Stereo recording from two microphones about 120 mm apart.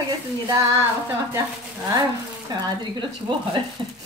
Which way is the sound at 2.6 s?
35° right (ahead or behind).